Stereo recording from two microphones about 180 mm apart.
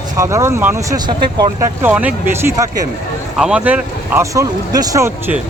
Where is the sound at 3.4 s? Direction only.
5° right (ahead or behind).